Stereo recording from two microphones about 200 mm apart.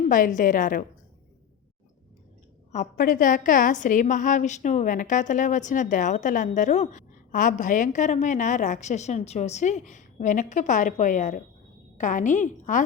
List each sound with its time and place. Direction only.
0.1 s a woman's voice: 40° left (ahead or behind)
2.7 s a woman's voice: 45° left (ahead or behind)